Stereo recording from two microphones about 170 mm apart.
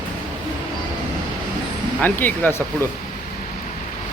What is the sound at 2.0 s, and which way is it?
Speech, 10° left (ahead or behind).